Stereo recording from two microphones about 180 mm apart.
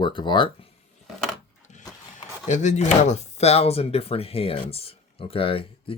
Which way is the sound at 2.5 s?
40° left (ahead or behind).